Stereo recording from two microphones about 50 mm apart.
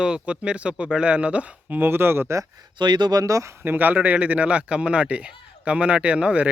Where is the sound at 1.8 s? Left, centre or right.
Right.